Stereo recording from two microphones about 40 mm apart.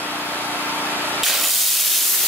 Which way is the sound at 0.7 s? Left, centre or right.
Right.